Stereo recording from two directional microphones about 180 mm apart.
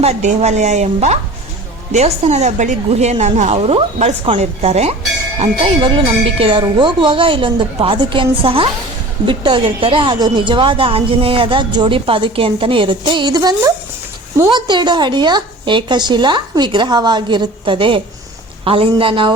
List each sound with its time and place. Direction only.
0.0 s a woman's voice: 40° right (ahead or behind)